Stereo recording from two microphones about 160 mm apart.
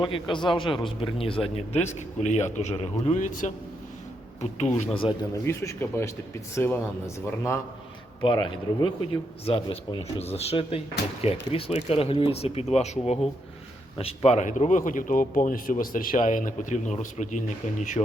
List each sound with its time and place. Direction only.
0.0 s speech: 30° left (ahead or behind); by 4.9 s 45° left (ahead or behind)
5.3 s speech: 20° left (ahead or behind)
8.2 s speech: 30° left (ahead or behind); by 18.0 s 50° left (ahead or behind)